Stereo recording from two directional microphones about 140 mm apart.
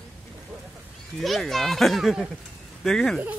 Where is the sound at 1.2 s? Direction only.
Centre (ahead or behind).